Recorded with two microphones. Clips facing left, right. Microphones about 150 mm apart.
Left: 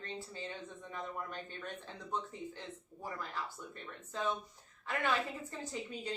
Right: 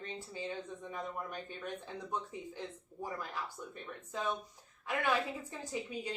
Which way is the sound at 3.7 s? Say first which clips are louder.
Right 2 dB; 15° right (ahead or behind).